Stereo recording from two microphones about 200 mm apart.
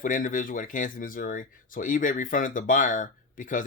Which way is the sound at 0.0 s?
40° left (ahead or behind).